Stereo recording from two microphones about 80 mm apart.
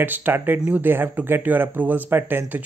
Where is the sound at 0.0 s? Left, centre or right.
Right.